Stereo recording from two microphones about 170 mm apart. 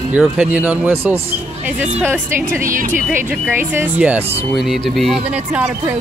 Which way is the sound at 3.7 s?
10° right (ahead or behind).